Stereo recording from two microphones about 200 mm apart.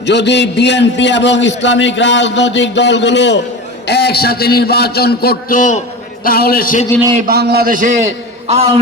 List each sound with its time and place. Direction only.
0.0 s a man's voice: 60° left (ahead or behind)
7.3 s a man's voice: 55° right (ahead or behind)
8.4 s a man's voice: 30° right (ahead or behind)